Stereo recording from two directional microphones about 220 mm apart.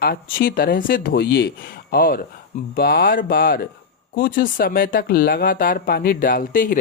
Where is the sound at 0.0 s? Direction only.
45° left (ahead or behind).